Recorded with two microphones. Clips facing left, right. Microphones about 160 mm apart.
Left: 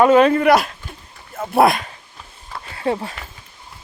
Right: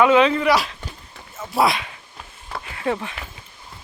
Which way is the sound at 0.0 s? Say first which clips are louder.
Left 3 dB; 45° left (ahead or behind).